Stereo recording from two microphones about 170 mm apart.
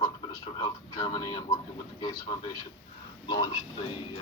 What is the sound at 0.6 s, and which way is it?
Speech, 25° left (ahead or behind).